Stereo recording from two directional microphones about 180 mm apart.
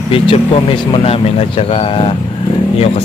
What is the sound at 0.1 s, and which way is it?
Speech, 30° left (ahead or behind).